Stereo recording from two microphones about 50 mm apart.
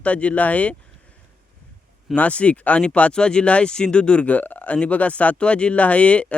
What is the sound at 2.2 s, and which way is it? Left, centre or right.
Speech, left.